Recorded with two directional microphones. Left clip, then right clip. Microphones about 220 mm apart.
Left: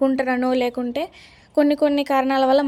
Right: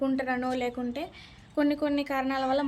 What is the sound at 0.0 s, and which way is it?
A woman's voice, 40° left (ahead or behind).